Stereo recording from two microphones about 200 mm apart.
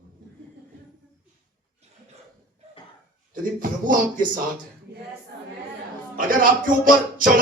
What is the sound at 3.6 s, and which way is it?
Speech, 45° right (ahead or behind).